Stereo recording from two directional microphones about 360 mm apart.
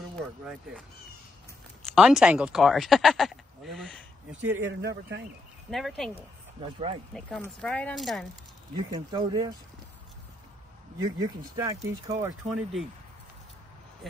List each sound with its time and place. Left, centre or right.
0.0 s speech: centre
4.6 s speech: right
5.7 s speech: centre
7.2 s speech: centre
8.7 s speech: centre
11.0 s speech: centre